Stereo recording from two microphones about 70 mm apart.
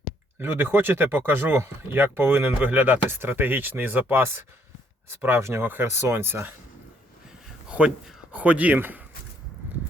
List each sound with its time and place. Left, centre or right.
0.3 s speech: right
7.7 s speech: centre